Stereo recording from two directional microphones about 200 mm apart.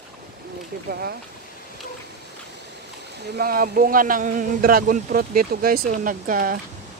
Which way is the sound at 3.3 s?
45° right (ahead or behind).